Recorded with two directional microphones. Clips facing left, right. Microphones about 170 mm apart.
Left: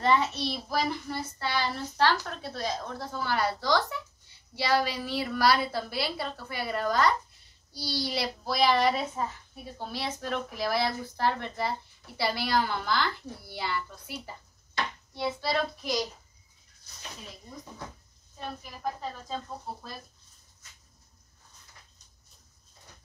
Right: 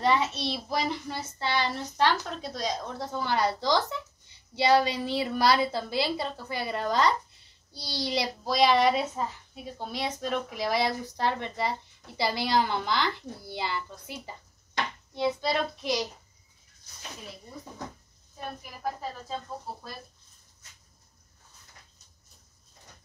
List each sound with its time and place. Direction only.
0.0 s a child's voice: 15° right (ahead or behind)
15.4 s a child's voice: 20° right (ahead or behind)
18.4 s speech: 10° right (ahead or behind)